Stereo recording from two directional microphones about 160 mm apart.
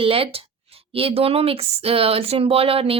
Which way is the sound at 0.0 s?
35° right (ahead or behind).